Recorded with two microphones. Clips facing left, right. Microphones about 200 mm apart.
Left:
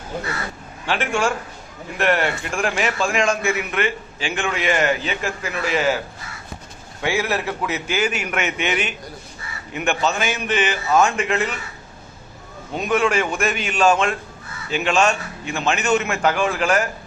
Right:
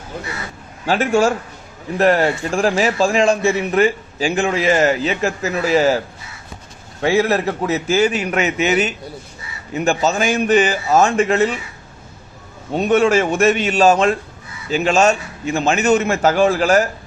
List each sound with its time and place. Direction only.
0.9 s a man's voice: 40° right (ahead or behind)
7.0 s a man's voice: 35° right (ahead or behind)
12.7 s a man's voice: 35° right (ahead or behind)